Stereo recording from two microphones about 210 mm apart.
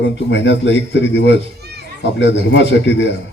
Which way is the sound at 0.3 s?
60° left (ahead or behind).